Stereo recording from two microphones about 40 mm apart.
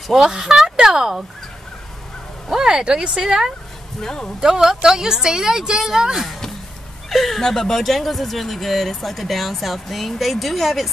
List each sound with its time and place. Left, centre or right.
0.1 s a woman's voice: centre
2.7 s a woman's voice: right
4.0 s speech: centre
4.4 s a woman's voice: centre
7.1 s speech: centre